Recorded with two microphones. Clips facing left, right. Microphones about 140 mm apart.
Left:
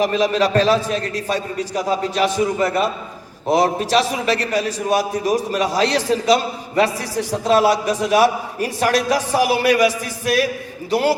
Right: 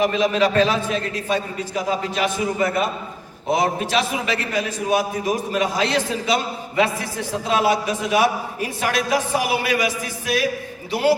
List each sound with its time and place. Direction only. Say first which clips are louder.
0.0 s a man's voice: left 1 dB; 40° left (ahead or behind)